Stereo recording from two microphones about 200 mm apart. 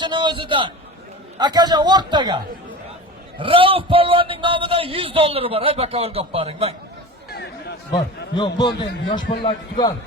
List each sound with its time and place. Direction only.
0.0 s a man's voice: 20° right (ahead or behind)
7.9 s a man's voice: 20° left (ahead or behind)